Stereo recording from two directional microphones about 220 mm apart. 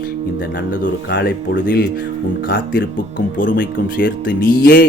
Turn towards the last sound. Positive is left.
turn(degrees=45)  # may be behind; listen again after turning